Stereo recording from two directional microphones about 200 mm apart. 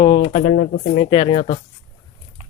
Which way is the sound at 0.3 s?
45° left (ahead or behind).